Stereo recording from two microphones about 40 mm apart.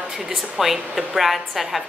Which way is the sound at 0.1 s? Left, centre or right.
Centre.